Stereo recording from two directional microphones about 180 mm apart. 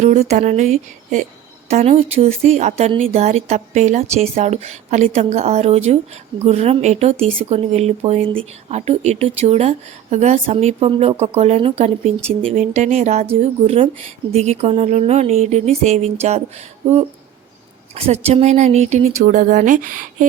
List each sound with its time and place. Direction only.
0.0 s speech: 35° right (ahead or behind)
17.9 s speech: 35° right (ahead or behind)